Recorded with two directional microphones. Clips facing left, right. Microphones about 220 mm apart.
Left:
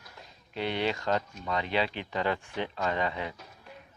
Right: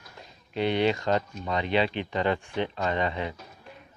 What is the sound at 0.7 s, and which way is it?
Speech, 20° right (ahead or behind).